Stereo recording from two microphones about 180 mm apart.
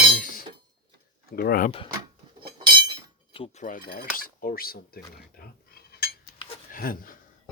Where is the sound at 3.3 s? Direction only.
30° left (ahead or behind).